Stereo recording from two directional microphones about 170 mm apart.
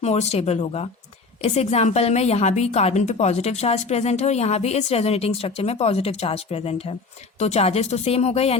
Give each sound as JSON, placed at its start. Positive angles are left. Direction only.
{"t": 0.0, "sound": "a woman's voice", "side_deg": 40}